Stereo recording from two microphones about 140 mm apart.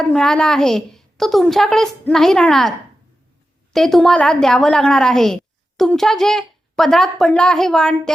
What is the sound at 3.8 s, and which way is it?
A woman's voice, centre (ahead or behind).